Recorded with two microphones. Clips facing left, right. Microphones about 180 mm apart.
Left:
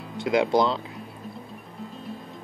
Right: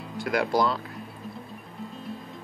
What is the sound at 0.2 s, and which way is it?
Speech, 20° left (ahead or behind).